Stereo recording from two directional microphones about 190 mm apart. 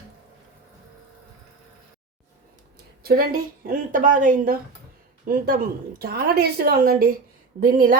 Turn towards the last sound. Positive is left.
turn(degrees=-45)  # may be behind; listen again after turning